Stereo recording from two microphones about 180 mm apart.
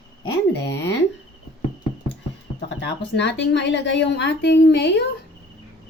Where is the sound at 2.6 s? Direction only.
80° left.